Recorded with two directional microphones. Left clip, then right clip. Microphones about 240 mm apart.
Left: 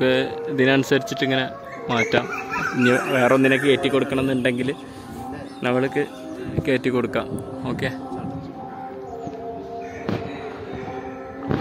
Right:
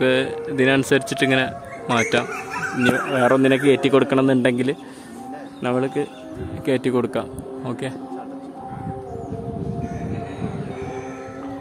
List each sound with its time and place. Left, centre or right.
0.0 s a man's voice: centre
5.6 s a man's voice: centre